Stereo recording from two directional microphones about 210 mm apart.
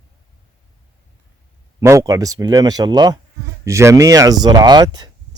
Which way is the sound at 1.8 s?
15° right (ahead or behind).